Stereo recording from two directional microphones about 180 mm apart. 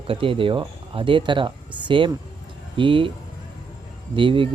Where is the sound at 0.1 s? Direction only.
30° right (ahead or behind).